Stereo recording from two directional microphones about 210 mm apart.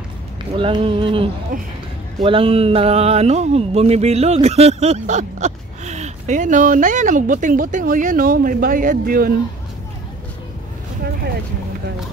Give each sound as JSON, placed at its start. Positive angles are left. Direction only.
{"t": 0.6, "sound": "speech", "side_deg": -25}
{"t": 1.5, "sound": "speech", "side_deg": -40}
{"t": 2.2, "sound": "speech", "side_deg": -25}